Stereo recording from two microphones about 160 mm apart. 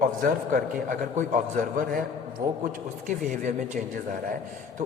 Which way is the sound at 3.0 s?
50° right (ahead or behind).